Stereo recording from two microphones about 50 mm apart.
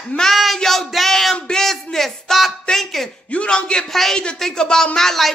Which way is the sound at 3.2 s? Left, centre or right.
Left.